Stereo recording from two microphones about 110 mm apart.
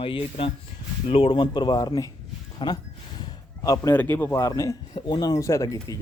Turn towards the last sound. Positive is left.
turn(degrees=30)  # may be behind; listen again after turning